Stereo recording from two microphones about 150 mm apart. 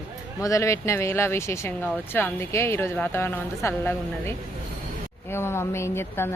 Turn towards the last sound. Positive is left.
turn(degrees=15)  # may be behind; listen again after turning